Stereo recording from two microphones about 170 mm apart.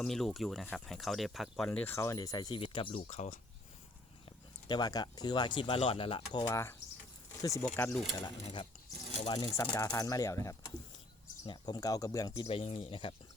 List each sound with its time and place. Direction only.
0.0 s speech: centre (ahead or behind); by 3.0 s 30° left (ahead or behind)
3.1 s speech: 50° left (ahead or behind)
4.7 s speech: 25° left (ahead or behind)
7.7 s speech: 5° left (ahead or behind)
8.2 s speech: 30° left (ahead or behind)